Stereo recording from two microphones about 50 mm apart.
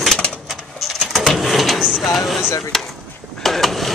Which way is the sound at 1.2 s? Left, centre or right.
Centre.